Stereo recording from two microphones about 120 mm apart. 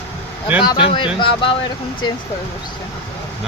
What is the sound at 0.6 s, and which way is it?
Speech, 50° left (ahead or behind).